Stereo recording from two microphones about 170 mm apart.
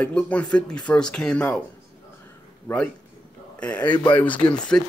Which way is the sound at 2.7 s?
10° left (ahead or behind).